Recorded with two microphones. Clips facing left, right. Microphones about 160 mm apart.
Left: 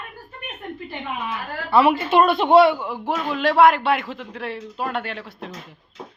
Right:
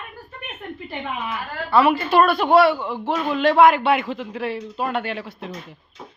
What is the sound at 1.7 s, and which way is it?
A woman's voice, 25° left (ahead or behind).